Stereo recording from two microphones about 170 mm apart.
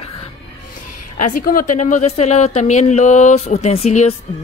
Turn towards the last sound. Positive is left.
turn(degrees=40)  # may be behind; listen again after turning